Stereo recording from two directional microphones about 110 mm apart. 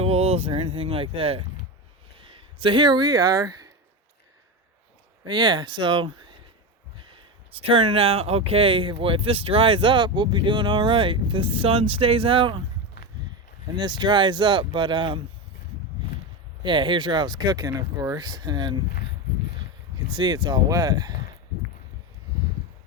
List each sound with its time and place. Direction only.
0.0 s speech: 65° right (ahead or behind); by 3.7 s 35° right (ahead or behind)
5.2 s speech: 45° right (ahead or behind)
13.7 s speech: 40° right (ahead or behind)
16.6 s speech: 45° right (ahead or behind)
20.1 s speech: 40° right (ahead or behind)